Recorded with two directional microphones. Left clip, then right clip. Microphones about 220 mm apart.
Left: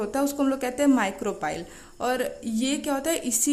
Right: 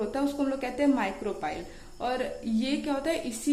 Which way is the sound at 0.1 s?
30° left (ahead or behind).